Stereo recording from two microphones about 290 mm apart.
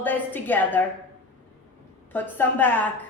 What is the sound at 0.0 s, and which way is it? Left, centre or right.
Speech, centre.